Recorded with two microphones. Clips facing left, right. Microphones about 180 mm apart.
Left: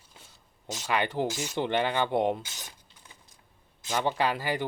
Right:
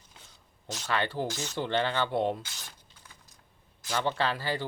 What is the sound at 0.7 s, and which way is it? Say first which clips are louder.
Speech: left 2 dB; 15° left (ahead or behind).